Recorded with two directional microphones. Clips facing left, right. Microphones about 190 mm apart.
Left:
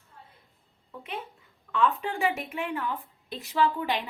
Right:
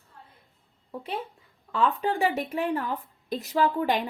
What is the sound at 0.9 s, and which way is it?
A woman's voice, 35° right (ahead or behind).